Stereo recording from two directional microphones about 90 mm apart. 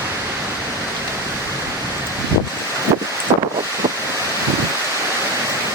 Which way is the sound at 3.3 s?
90° right.